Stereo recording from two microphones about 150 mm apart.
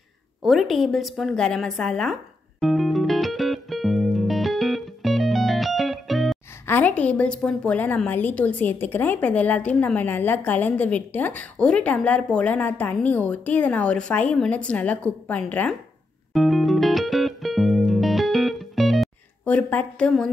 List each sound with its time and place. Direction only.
0.4 s a woman's voice: centre (ahead or behind)
2.6 s music: centre (ahead or behind)
6.7 s a woman's voice: 10° left (ahead or behind)
16.3 s music: centre (ahead or behind)
19.4 s a woman's voice: 10° left (ahead or behind)